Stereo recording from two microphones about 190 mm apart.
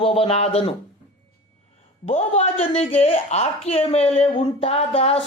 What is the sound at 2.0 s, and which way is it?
A woman's voice, 35° left (ahead or behind).